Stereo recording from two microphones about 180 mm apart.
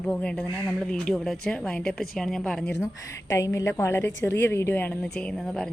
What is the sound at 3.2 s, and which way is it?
Speech, 15° left (ahead or behind).